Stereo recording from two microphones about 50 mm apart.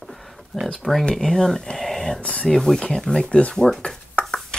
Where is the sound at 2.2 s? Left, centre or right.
Left.